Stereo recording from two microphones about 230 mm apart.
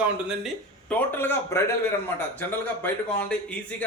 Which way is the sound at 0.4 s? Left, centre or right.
Centre.